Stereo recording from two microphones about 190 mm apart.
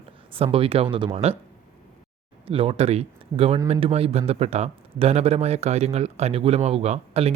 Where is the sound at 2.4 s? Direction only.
30° right (ahead or behind).